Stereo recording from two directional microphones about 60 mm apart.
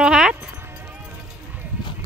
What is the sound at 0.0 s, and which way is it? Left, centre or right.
Music, centre.